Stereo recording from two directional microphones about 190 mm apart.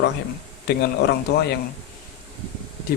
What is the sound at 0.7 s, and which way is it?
Speech, 60° left (ahead or behind).